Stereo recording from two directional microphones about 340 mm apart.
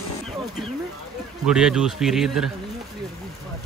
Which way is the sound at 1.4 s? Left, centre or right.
Centre.